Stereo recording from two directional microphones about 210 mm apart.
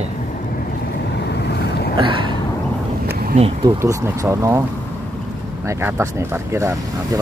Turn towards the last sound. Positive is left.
turn(degrees=-15)  # may be behind; listen again after turning